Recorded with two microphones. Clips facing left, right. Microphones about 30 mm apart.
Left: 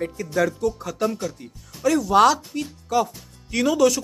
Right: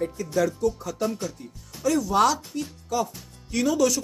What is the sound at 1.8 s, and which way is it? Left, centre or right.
Speech, left.